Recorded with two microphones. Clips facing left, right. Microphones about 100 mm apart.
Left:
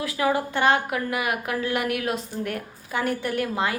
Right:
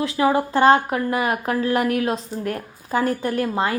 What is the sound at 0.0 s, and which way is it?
A woman's voice, 30° right (ahead or behind).